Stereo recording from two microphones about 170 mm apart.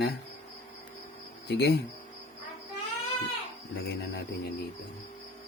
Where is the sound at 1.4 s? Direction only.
80° left.